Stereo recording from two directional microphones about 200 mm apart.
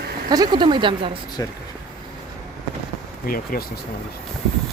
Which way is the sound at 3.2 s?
45° left (ahead or behind).